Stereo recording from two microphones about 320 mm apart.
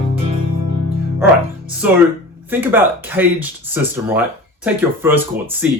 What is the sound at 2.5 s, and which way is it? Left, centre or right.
Speech, centre.